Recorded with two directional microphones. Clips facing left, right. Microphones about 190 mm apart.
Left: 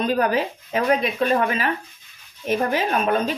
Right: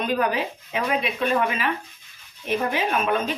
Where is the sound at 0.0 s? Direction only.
40° left (ahead or behind).